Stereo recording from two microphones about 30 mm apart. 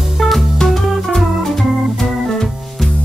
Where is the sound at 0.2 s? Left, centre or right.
Centre.